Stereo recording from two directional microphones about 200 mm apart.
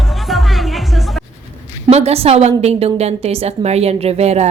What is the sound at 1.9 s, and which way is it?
A woman's voice, 30° right (ahead or behind).